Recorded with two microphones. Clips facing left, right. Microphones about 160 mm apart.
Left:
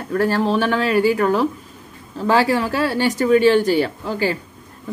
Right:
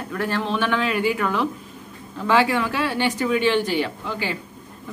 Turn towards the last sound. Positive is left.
turn(degrees=40)  # may be behind; listen again after turning